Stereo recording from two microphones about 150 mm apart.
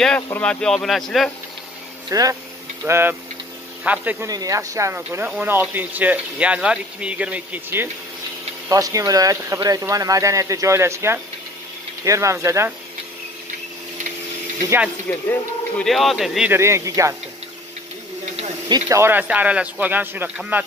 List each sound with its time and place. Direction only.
0.0 s speech: 5° left (ahead or behind)
2.0 s speech: 25° right (ahead or behind)
4.3 s speech: 20° right (ahead or behind)
8.6 s speech: 25° right (ahead or behind)
15.1 s speech: 15° left (ahead or behind)
15.8 s speech: centre (ahead or behind)
16.4 s speech: 15° right (ahead or behind)
18.7 s speech: 20° right (ahead or behind)